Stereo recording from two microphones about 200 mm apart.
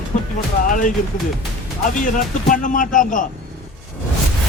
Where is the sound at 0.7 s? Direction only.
40° left (ahead or behind).